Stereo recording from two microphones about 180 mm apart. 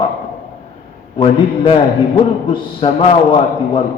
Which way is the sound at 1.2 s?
30° left (ahead or behind).